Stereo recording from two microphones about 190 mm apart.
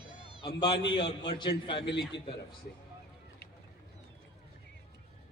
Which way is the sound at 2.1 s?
70° left (ahead or behind).